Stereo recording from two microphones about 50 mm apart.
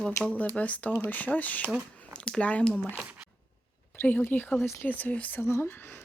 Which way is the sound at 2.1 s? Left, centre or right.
Centre.